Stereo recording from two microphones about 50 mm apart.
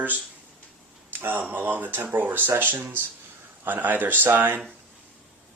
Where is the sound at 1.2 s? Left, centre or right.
Right.